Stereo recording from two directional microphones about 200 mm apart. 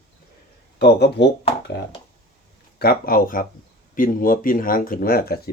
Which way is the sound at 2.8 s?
50° left (ahead or behind).